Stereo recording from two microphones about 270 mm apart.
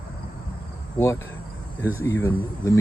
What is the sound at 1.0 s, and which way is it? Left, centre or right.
Speech, centre.